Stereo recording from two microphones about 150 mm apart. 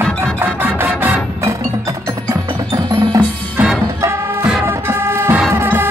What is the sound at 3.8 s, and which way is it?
Music, 20° right (ahead or behind).